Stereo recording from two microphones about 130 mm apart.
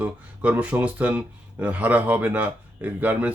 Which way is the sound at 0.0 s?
10° right (ahead or behind).